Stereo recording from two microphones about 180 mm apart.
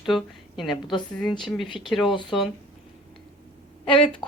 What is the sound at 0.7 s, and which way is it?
Speech, 25° left (ahead or behind).